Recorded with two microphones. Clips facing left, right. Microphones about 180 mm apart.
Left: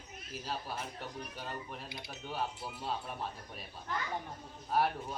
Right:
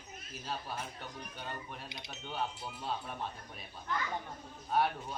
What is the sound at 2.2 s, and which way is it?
Speech, 5° left (ahead or behind).